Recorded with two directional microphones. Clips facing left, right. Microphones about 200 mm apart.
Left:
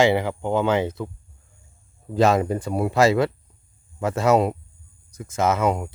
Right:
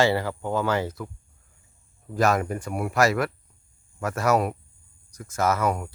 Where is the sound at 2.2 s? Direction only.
30° left (ahead or behind).